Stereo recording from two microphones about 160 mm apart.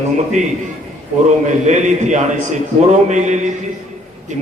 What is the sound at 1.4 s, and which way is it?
A man's voice, 50° right (ahead or behind).